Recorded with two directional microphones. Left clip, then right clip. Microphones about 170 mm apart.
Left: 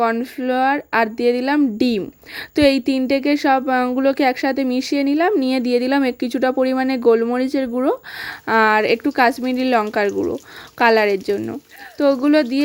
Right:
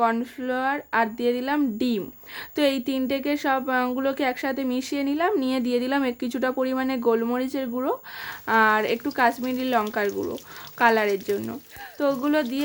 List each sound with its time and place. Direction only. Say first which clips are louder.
0.0 s a woman's voice: left 4 dB; 30° left (ahead or behind)
10.2 s a woman's voice: left 8 dB; 25° left (ahead or behind)